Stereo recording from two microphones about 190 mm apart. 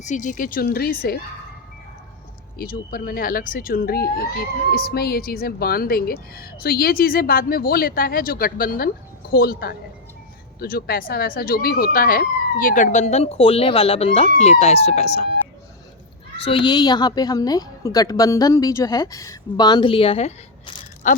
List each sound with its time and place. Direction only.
0.0 s speech: 40° left (ahead or behind)
2.6 s speech: 50° left (ahead or behind)
16.4 s a woman's voice: 30° left (ahead or behind)